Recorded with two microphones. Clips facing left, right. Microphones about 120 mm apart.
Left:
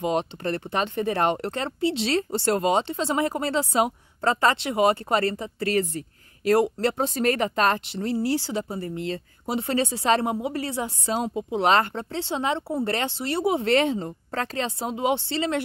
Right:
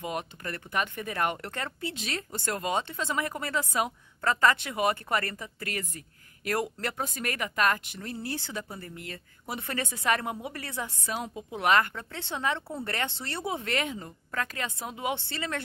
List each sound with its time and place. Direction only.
0.0 s speech: 25° left (ahead or behind)